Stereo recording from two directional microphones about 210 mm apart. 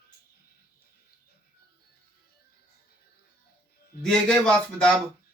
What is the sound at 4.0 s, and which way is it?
Speech, 5° left (ahead or behind).